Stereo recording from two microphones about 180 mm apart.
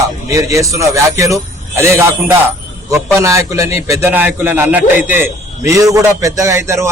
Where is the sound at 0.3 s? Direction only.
20° right (ahead or behind).